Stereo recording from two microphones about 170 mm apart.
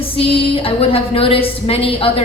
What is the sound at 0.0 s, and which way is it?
A woman's voice, 35° left (ahead or behind).